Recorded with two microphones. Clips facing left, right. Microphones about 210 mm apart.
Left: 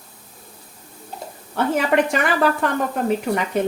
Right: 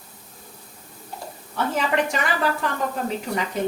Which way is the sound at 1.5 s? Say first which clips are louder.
Left 5 dB; 60° left (ahead or behind).